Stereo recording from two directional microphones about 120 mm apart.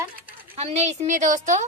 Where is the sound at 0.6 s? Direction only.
65° right (ahead or behind); by 1.6 s 90° right.